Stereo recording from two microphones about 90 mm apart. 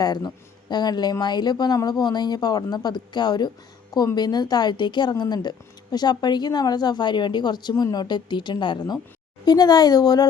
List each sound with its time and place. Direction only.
0.0 s a man's voice: 45° left (ahead or behind)